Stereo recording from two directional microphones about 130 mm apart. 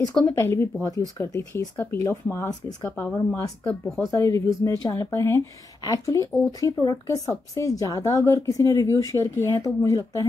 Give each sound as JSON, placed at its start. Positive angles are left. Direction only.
{"t": 0.2, "sound": "speech", "side_deg": 20}
{"t": 3.6, "sound": "speech", "side_deg": 5}
{"t": 4.1, "sound": "speech", "side_deg": 25}